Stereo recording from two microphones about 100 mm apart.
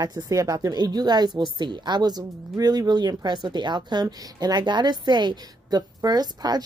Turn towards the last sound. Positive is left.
turn(degrees=-40)  # may be behind; listen again after turning